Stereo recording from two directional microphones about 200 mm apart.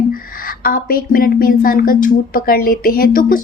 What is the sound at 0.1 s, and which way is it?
Speech, 45° left (ahead or behind).